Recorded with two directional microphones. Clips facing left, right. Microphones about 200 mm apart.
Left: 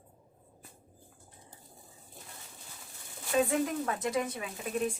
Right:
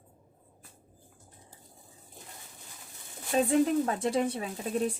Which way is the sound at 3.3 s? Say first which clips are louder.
Right 4 dB; 30° right (ahead or behind).